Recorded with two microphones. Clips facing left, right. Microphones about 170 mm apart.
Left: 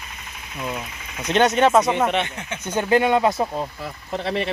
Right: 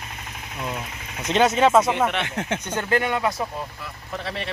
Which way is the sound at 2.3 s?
90° right.